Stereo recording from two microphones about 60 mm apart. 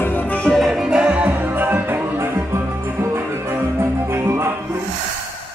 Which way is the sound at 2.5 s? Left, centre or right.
Right.